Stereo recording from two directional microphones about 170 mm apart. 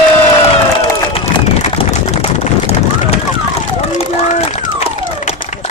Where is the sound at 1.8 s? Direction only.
40° left (ahead or behind).